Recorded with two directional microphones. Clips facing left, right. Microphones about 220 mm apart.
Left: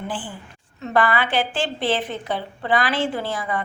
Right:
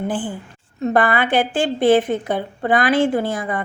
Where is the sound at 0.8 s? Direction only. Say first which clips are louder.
Right 3 dB; 50° right (ahead or behind).